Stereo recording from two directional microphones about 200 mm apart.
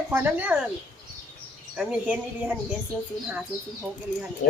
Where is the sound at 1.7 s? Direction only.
5° right (ahead or behind).